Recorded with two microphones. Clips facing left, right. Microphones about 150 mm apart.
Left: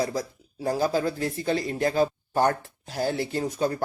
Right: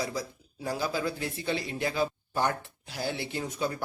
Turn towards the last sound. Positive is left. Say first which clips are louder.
# left 6 dB
turn(degrees=40)  # may be behind; listen again after turning